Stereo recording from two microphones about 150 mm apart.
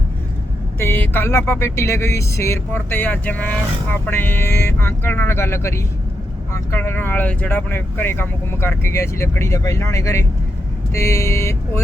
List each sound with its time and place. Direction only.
0.8 s speech: 15° left (ahead or behind)